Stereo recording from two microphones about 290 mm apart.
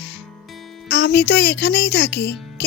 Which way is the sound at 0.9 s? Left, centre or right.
Left.